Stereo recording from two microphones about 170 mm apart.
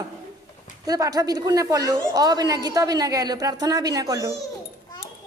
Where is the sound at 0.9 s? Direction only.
20° right (ahead or behind).